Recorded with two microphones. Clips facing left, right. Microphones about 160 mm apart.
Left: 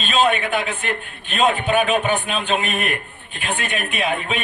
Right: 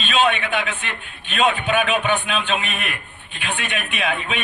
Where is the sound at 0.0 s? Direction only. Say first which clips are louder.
Left 1 dB; 40° left (ahead or behind).